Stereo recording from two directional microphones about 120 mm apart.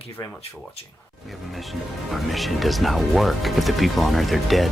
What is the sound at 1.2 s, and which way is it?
Speech, centre (ahead or behind).